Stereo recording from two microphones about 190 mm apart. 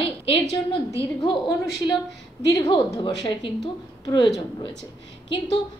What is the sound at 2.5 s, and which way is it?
A woman's voice, 25° left (ahead or behind).